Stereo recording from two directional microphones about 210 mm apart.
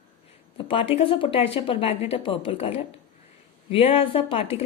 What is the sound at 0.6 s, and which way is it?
A woman's voice, 25° left (ahead or behind).